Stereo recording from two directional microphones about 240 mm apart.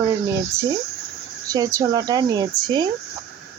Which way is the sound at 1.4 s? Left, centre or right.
Centre.